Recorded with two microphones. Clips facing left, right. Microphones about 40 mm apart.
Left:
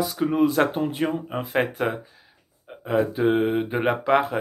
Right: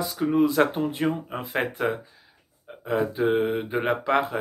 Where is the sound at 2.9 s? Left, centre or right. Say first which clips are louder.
Left 2 dB; centre.